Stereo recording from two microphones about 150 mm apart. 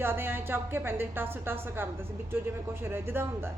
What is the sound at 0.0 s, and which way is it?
Speech, 15° right (ahead or behind).